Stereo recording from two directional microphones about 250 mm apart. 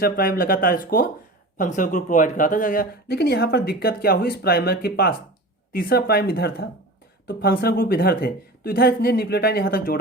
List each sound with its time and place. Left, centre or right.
0.0 s speech: left